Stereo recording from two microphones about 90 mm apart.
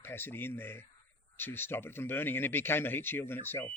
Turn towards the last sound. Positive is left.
turn(degrees=25)  # may be behind; listen again after turning